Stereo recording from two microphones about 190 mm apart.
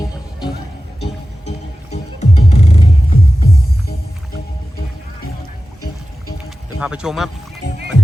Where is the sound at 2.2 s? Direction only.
35° left (ahead or behind).